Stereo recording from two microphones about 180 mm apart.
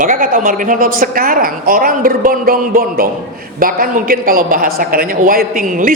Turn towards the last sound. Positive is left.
turn(degrees=-50)  # may be behind; listen again after turning